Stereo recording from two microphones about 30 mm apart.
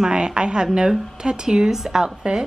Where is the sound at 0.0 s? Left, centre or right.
Right; by 2.1 s centre.